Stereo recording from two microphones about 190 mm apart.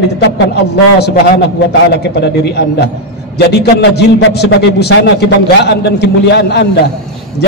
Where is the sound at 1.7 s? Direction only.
60° left (ahead or behind).